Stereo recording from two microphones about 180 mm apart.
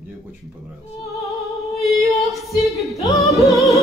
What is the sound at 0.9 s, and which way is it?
Music, 20° left (ahead or behind).